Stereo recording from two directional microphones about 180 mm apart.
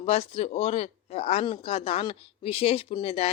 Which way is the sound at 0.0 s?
35° left (ahead or behind).